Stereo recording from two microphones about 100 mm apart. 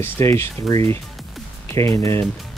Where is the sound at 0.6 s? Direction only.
35° left (ahead or behind).